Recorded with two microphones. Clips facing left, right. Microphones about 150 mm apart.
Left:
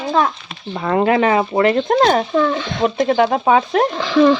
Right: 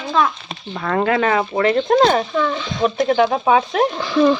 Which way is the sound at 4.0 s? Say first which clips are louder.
Left 3 dB; 90° left.